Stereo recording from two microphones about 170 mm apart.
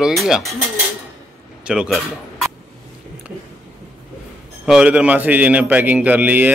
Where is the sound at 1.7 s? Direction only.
Centre (ahead or behind).